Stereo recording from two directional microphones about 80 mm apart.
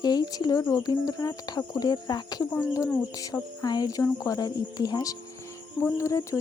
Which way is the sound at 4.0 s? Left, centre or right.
Left.